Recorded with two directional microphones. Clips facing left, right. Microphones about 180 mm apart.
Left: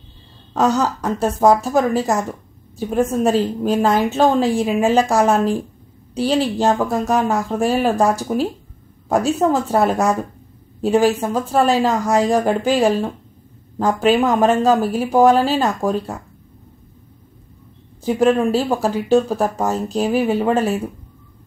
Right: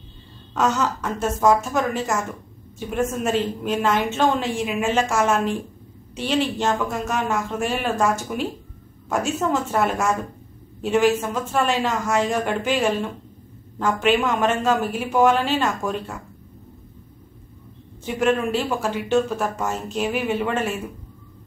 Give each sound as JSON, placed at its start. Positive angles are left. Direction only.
{"t": 0.6, "sound": "a woman's voice", "side_deg": 35}
{"t": 18.3, "sound": "a woman's voice", "side_deg": 35}